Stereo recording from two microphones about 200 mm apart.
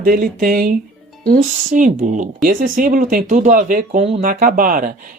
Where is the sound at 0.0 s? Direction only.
45° right (ahead or behind).